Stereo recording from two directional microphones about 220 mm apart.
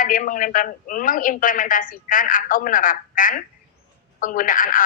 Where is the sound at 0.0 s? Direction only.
40° left (ahead or behind).